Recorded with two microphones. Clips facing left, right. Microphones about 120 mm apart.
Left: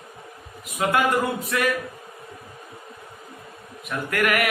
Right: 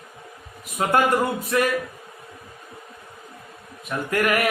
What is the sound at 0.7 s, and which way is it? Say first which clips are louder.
Speech: right 2 dB; 40° right (ahead or behind).